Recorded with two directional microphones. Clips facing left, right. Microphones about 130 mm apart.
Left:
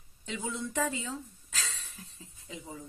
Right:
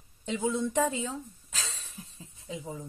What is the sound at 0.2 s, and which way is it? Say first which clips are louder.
A woman's voice: right 7 dB; 25° right (ahead or behind).